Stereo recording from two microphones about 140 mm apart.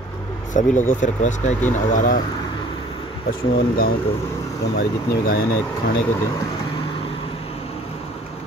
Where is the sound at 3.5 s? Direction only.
90° left.